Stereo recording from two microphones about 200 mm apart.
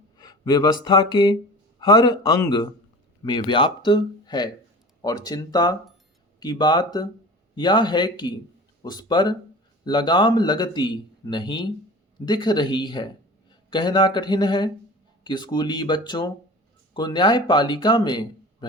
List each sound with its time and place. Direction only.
0.2 s a man's voice: 20° left (ahead or behind)